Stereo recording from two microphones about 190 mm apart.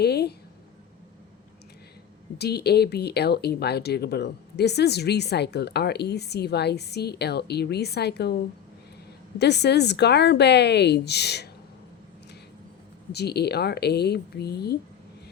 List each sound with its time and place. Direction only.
0.0 s a sound: 60° left (ahead or behind)
2.4 s speech: 60° left (ahead or behind)
9.4 s speech: 60° left (ahead or behind)
13.1 s speech: 60° left (ahead or behind)